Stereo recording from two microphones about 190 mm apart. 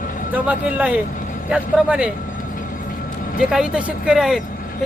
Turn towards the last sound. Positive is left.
turn(degrees=-5)  # may be behind; listen again after turning